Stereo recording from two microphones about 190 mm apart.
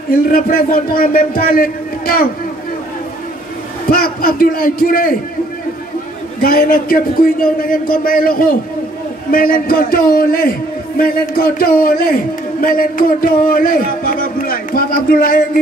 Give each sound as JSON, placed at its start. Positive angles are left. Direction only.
{"t": 0.1, "sound": "a man's voice", "side_deg": 50}
{"t": 3.9, "sound": "a man's voice", "side_deg": 50}
{"t": 6.4, "sound": "a man's voice", "side_deg": 50}